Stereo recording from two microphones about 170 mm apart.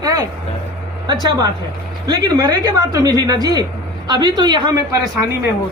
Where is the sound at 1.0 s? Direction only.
25° right (ahead or behind).